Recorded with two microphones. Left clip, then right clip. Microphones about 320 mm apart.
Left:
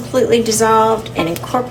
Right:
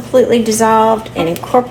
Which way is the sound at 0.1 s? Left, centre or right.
Centre.